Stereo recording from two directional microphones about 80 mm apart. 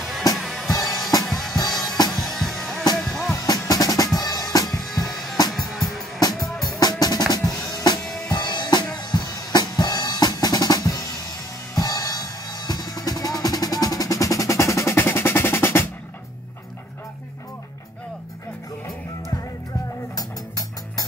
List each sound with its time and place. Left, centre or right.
0.4 s drum kit: centre
0.8 s music: centre
1.2 s drum kit: centre
1.7 s music: centre
3.3 s drum: left
4.2 s drum kit: left
5.0 s music: centre
6.8 s drum: left
8.3 s music: left
8.9 s drum: left
11.7 s music: left
15.0 s percussion: left
20.2 s music: left